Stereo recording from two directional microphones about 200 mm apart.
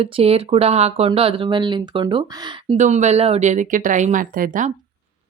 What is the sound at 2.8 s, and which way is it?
A woman's voice, 35° right (ahead or behind).